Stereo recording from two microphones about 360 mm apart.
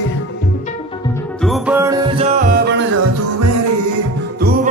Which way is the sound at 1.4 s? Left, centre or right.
Centre.